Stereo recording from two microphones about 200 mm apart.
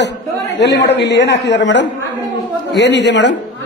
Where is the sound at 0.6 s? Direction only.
55° left (ahead or behind).